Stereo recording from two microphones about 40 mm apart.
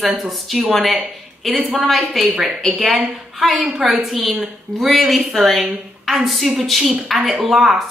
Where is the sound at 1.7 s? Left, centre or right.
Centre.